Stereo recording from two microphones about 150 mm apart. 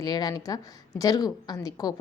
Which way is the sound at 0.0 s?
25° left (ahead or behind).